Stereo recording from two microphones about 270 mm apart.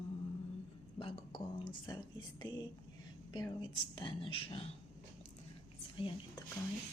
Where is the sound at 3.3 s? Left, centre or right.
Centre.